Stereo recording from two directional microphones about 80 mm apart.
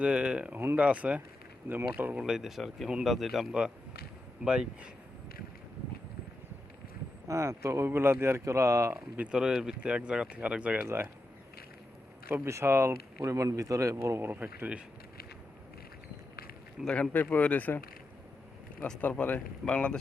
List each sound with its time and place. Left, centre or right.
0.0 s speech: centre
2.1 s speech: centre
4.4 s speech: centre
7.3 s speech: right
9.1 s speech: centre
10.8 s speech: right
12.3 s speech: right
14.3 s speech: centre
16.8 s speech: centre
19.0 s speech: left